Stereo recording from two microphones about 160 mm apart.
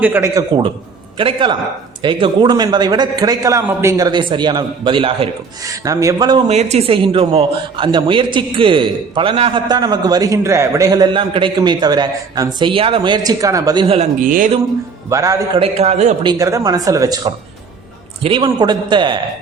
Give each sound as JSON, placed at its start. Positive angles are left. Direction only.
{"t": 0.0, "sound": "a man's voice", "side_deg": -10}
{"t": 0.3, "sound": "a man's voice", "side_deg": -30}
{"t": 5.6, "sound": "a man's voice", "side_deg": -20}
{"t": 6.5, "sound": "a man's voice", "side_deg": -45}
{"t": 13.8, "sound": "a man's voice", "side_deg": -35}
{"t": 14.2, "sound": "speech", "side_deg": -55}
{"t": 15.1, "sound": "a man's voice", "side_deg": -20}
{"t": 15.6, "sound": "a man's voice", "side_deg": -40}
{"t": 16.2, "sound": "a man's voice", "side_deg": -20}
{"t": 18.2, "sound": "a man's voice", "side_deg": -35}